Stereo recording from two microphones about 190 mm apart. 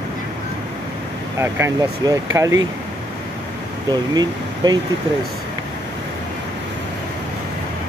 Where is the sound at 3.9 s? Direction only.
20° right (ahead or behind).